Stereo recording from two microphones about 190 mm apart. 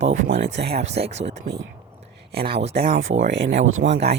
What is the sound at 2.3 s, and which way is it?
Speech, 55° right (ahead or behind).